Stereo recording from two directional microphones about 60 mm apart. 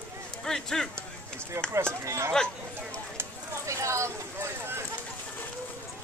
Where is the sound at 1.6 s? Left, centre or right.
Right.